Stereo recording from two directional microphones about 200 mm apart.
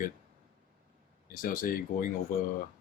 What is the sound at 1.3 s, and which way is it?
Speech, 45° left (ahead or behind).